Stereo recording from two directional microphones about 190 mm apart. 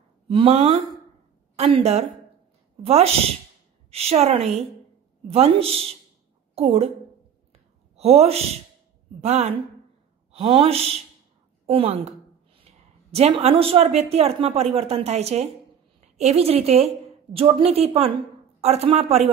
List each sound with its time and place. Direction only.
0.3 s a woman's voice: 30° right (ahead or behind)
7.9 s a woman's voice: 35° right (ahead or behind)